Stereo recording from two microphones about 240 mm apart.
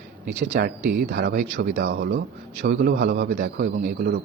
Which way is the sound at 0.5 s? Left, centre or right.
Right.